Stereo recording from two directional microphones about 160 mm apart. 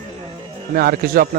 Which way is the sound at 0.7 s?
70° right (ahead or behind).